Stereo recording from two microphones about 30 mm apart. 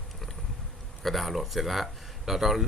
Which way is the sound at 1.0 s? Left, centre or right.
Centre.